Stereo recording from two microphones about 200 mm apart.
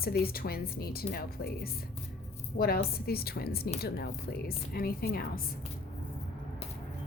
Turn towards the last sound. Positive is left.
turn(degrees=50)  # may be behind; listen again after turning